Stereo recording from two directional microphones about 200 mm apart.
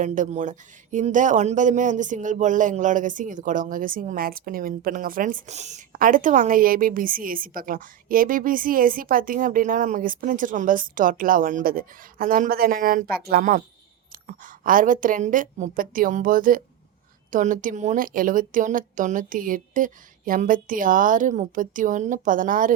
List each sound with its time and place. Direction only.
0.0 s a woman's voice: 40° right (ahead or behind)